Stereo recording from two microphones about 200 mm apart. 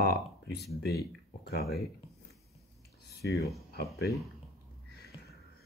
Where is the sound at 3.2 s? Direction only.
55° left (ahead or behind).